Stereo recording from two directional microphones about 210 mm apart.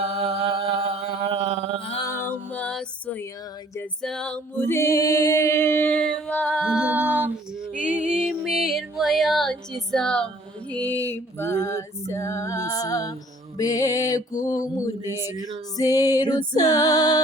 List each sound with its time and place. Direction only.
0.0 s mantra: 30° right (ahead or behind)
1.8 s music: 25° left (ahead or behind)
2.0 s music: 10° left (ahead or behind)
15.8 s music: 15° left (ahead or behind)